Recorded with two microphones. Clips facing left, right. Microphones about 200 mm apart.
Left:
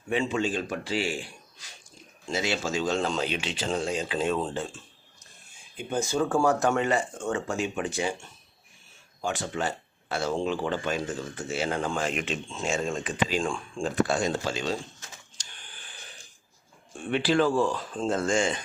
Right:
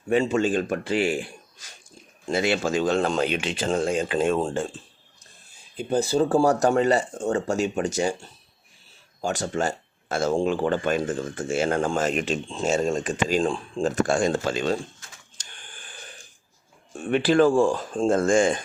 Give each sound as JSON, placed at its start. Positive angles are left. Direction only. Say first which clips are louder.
{"t": 0.1, "sound": "speech", "louder": "right 6 dB", "side_deg": -45}
{"t": 15.4, "sound": "printer", "louder": "right 3 dB", "side_deg": -50}
{"t": 16.9, "sound": "speech", "louder": "right 4 dB", "side_deg": -45}